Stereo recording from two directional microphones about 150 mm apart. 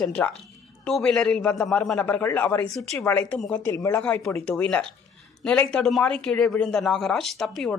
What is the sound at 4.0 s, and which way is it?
Speech, 10° left (ahead or behind).